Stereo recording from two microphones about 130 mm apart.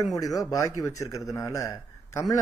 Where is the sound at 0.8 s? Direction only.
25° left (ahead or behind).